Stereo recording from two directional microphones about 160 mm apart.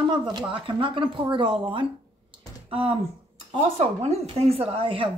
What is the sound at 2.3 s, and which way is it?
Typing, 30° right (ahead or behind).